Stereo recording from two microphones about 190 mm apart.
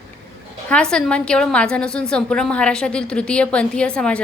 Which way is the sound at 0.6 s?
5° left (ahead or behind).